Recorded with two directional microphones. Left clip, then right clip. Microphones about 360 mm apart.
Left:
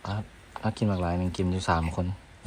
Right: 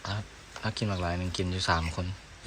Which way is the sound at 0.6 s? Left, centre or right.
Centre.